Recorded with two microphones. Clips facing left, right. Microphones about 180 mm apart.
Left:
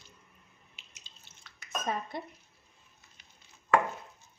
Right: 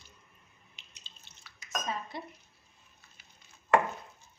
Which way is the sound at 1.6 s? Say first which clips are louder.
Left 2 dB; 55° left (ahead or behind).